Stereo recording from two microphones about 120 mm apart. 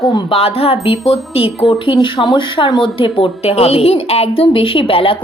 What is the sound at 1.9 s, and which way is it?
Speech, 35° left (ahead or behind).